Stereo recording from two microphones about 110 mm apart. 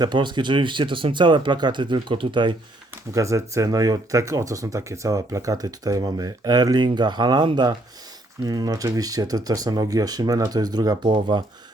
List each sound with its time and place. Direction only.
0.0 s speech: 45° right (ahead or behind)
2.9 s speech: 25° right (ahead or behind); by 11.4 s 40° right (ahead or behind)